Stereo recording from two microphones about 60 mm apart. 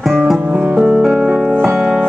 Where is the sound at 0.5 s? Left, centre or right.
Right; by 2.0 s centre.